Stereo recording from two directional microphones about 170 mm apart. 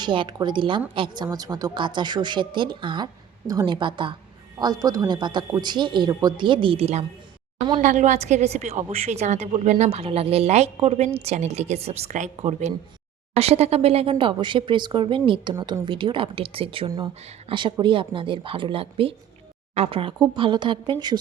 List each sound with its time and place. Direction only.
0.0 s a woman's voice: 30° right (ahead or behind)